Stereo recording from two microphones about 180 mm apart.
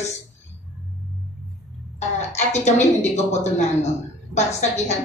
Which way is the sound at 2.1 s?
40° left (ahead or behind).